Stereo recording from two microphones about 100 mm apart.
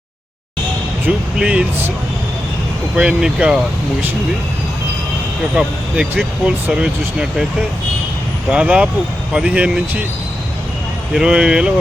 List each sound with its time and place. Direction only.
1.4 s speech: 10° right (ahead or behind)
2.9 s speech: 10° right (ahead or behind)
5.5 s speech: 10° right (ahead or behind)
8.4 s speech: 10° right (ahead or behind)
11.1 s speech: 10° right (ahead or behind)